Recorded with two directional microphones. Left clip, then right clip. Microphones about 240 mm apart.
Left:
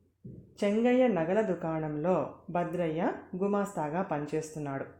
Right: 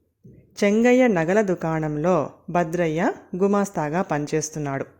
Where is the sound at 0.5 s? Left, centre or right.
Right.